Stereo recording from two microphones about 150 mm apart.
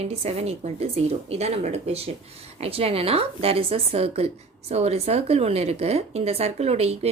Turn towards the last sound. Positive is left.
turn(degrees=-45)  # may be behind; listen again after turning